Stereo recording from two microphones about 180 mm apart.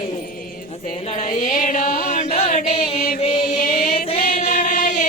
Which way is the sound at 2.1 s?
35° left (ahead or behind).